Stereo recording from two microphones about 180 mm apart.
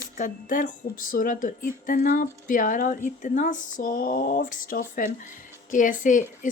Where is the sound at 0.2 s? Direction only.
50° left (ahead or behind).